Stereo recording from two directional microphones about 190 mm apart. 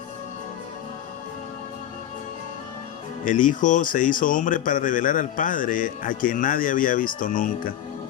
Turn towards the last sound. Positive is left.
turn(degrees=45)  # may be behind; listen again after turning